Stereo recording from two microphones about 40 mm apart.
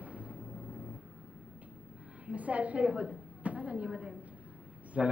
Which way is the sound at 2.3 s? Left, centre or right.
Right.